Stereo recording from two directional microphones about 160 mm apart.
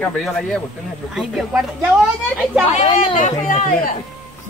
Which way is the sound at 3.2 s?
50° left (ahead or behind).